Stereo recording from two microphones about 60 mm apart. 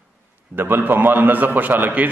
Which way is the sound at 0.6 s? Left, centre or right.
Right.